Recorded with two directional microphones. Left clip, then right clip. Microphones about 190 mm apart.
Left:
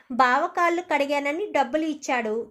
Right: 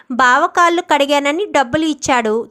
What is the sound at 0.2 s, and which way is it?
A woman's voice, 25° right (ahead or behind).